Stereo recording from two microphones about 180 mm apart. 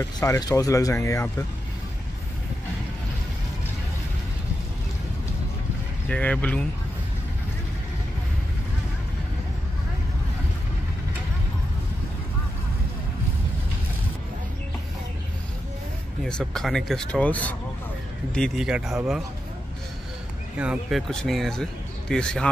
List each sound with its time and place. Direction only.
0.2 s speech: 20° left (ahead or behind)
6.0 s speech: 5° left (ahead or behind)
16.3 s speech: 5° left (ahead or behind)
20.5 s speech: 5° right (ahead or behind)